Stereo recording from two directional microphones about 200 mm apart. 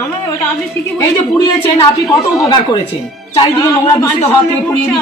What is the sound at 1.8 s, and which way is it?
A woman's voice, 20° left (ahead or behind).